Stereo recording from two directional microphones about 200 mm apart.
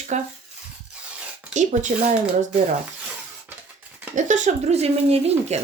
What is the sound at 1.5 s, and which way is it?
Speech, 35° right (ahead or behind).